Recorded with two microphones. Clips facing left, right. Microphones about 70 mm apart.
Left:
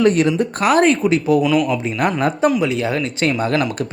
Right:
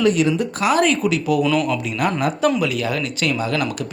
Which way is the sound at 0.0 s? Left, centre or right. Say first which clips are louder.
Left 2 dB; left.